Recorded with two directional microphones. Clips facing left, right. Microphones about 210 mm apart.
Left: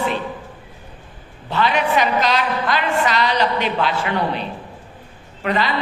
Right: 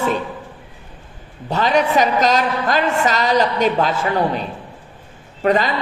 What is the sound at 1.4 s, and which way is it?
A woman's voice, 40° right (ahead or behind).